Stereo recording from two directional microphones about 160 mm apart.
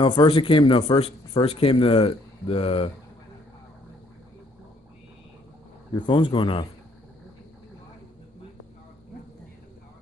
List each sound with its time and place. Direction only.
0.0 s speech: 30° left (ahead or behind)
5.9 s speech: 30° left (ahead or behind)